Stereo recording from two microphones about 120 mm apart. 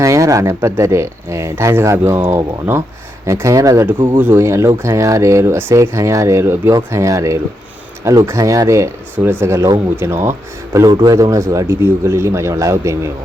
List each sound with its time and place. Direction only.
0.0 s speech: 25° right (ahead or behind)
10.8 s speech: 30° right (ahead or behind)